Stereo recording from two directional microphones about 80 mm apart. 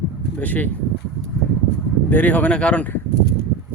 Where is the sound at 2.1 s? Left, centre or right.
Centre.